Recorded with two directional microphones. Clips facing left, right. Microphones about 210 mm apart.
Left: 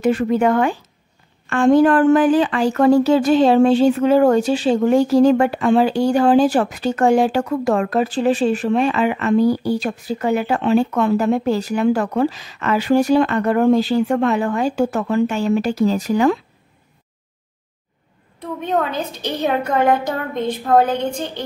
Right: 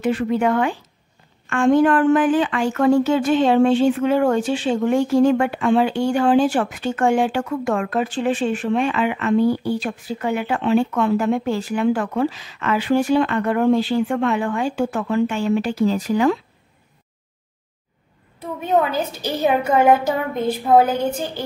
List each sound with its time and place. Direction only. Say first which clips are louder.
0.0 s speech: left 3 dB; 45° left (ahead or behind)
18.4 s a woman's voice: right 1 dB; 5° right (ahead or behind)